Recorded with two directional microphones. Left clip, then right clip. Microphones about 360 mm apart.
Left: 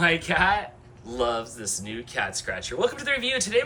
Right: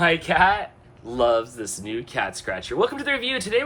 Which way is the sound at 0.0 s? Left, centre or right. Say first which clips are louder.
Right 3 dB; centre.